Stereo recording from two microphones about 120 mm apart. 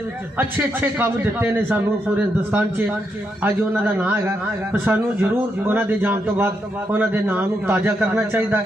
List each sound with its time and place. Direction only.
0.3 s a man's voice: 15° right (ahead or behind)